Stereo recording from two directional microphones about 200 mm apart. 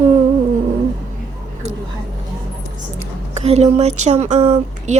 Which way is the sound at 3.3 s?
30° right (ahead or behind).